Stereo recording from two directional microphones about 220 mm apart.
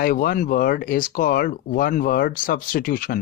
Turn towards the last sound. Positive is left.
turn(degrees=40)  # may be behind; listen again after turning